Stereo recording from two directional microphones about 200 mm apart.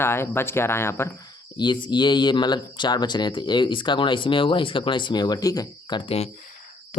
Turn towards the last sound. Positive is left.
turn(degrees=30)  # may be behind; listen again after turning